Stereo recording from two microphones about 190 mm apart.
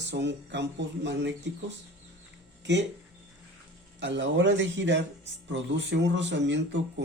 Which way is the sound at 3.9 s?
70° right (ahead or behind).